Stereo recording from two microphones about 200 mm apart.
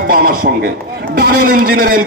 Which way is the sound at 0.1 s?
45° right (ahead or behind).